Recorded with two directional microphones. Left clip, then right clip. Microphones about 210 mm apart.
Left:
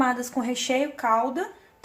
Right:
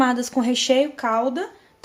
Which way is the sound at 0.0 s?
40° right (ahead or behind).